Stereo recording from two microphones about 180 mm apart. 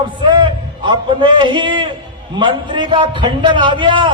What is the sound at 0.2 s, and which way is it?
A man's voice, 25° right (ahead or behind).